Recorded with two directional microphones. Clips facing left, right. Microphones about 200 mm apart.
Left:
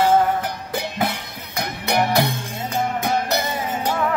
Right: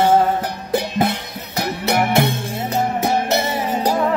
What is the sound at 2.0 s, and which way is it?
Music, 25° right (ahead or behind).